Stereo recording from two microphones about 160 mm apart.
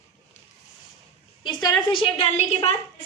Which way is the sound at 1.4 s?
25° left (ahead or behind).